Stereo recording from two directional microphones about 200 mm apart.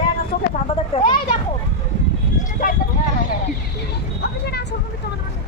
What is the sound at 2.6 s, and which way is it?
Speech, 45° left (ahead or behind).